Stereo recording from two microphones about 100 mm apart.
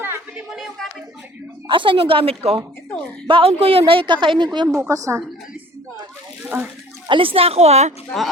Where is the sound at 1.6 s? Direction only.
60° right (ahead or behind).